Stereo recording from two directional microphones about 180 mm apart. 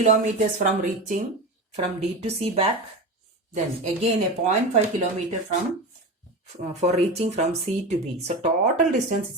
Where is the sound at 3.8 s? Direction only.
40° right (ahead or behind).